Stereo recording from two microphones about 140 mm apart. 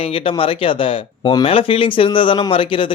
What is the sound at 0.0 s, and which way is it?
Speech, 40° left (ahead or behind).